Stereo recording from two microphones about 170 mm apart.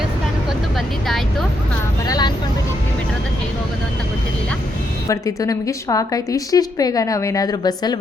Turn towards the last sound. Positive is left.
turn(degrees=25)  # may be behind; listen again after turning